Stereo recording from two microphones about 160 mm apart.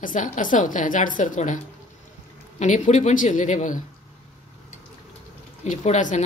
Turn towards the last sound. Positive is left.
turn(degrees=50)  # may be behind; listen again after turning